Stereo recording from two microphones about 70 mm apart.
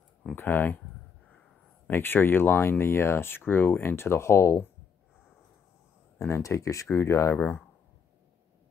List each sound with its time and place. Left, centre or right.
0.4 s speech: left
1.9 s speech: left
6.1 s speech: left
7.3 s speech: left